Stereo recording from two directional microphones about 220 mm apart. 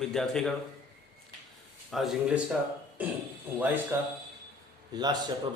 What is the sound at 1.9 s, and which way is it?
Speech, centre (ahead or behind).